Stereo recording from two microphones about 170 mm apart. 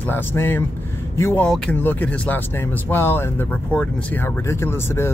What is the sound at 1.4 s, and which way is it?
Speech, 5° left (ahead or behind).